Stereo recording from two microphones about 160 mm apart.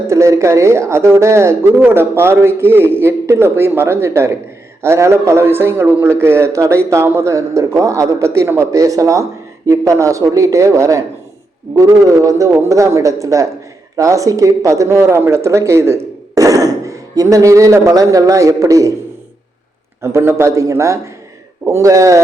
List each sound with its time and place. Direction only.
0.1 s a man's voice: 20° right (ahead or behind)
20.0 s a man's voice: 15° right (ahead or behind)